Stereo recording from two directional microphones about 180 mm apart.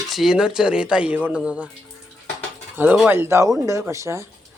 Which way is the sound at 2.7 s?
10° right (ahead or behind).